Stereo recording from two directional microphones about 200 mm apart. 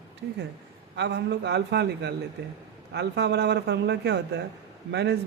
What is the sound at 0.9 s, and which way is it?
Speech, 60° right (ahead or behind).